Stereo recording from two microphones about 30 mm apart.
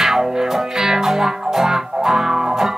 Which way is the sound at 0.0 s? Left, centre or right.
Centre.